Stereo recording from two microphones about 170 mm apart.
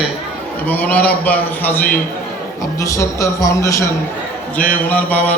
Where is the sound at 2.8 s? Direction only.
15° left (ahead or behind).